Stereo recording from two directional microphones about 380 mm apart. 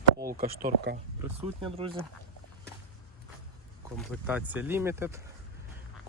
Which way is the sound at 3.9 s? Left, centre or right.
Centre.